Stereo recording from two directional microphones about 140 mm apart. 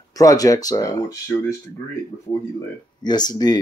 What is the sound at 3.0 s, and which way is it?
Speech, 30° left (ahead or behind).